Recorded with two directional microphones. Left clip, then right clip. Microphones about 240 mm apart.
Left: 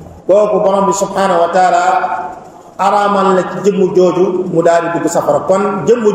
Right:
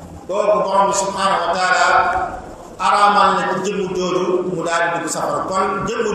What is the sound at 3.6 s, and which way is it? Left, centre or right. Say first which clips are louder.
A man's voice: left 10 dB; left.